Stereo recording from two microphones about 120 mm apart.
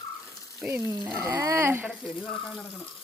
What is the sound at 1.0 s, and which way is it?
Speech, 15° right (ahead or behind).